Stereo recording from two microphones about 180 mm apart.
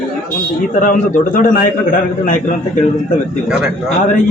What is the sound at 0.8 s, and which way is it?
A man's voice, 50° left (ahead or behind).